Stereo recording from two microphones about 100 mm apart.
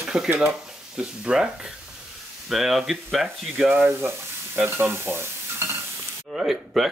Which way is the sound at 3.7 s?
20° right (ahead or behind).